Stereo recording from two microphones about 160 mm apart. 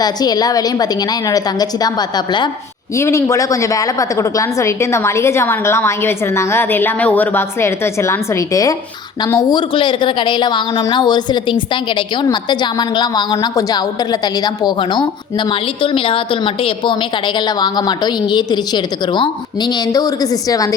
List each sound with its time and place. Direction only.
0.0 s a woman's voice: 25° left (ahead or behind)